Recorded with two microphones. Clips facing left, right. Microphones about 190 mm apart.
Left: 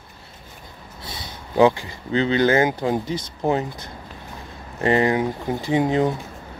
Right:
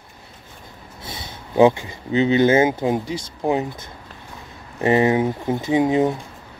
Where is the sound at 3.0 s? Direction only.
10° right (ahead or behind).